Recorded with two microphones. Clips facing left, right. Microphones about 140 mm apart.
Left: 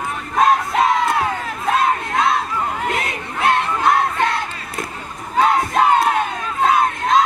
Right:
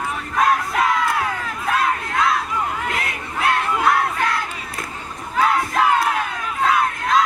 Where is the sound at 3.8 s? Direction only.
25° left (ahead or behind).